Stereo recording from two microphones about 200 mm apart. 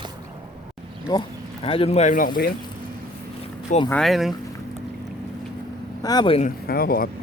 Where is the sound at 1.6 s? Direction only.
30° left (ahead or behind).